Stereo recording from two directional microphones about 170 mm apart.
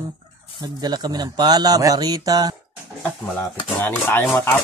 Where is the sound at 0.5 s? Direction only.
25° right (ahead or behind).